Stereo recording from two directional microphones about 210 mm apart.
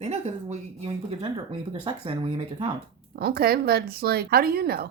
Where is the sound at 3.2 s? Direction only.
45° right (ahead or behind).